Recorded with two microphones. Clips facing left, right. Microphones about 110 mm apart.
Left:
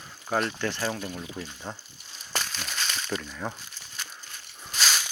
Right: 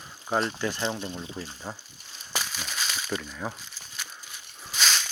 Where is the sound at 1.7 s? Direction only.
5° right (ahead or behind).